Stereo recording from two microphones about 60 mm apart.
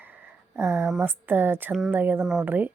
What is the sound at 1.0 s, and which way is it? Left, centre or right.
Speech, right.